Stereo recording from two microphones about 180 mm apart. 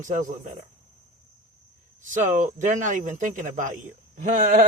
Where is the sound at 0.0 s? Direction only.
45° right (ahead or behind).